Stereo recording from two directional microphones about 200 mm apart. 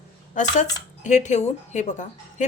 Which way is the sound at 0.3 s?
35° left (ahead or behind).